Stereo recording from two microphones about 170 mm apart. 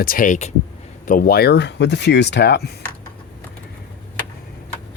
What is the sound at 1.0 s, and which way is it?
Speech, 55° left (ahead or behind).